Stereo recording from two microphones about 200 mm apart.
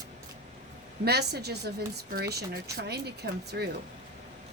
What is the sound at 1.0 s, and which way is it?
A woman's voice, 55° right (ahead or behind).